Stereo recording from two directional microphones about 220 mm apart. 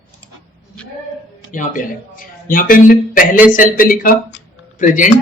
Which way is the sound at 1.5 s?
35° left (ahead or behind).